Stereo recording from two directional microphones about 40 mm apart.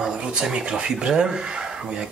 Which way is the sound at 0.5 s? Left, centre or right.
Right.